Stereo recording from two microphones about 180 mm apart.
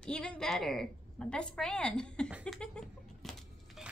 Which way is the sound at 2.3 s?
5° right (ahead or behind).